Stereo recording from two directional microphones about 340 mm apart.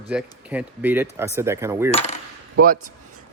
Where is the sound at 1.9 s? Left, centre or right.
Centre.